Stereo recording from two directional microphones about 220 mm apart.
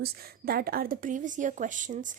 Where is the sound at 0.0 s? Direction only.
45° right (ahead or behind).